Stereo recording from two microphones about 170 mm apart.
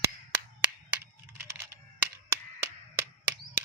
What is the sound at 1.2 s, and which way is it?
Computer keyboard, 15° right (ahead or behind).